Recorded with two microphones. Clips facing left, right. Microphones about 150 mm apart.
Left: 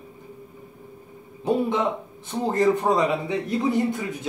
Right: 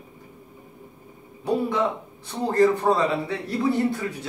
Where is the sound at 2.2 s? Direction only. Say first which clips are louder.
Right 1 dB; 20° left (ahead or behind).